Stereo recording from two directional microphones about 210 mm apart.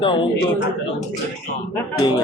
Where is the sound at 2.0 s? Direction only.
20° left (ahead or behind).